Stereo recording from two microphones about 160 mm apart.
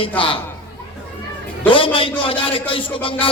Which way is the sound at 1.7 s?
35° left (ahead or behind).